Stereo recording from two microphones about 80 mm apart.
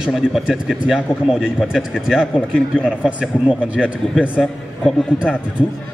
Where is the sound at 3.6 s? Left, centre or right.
Centre.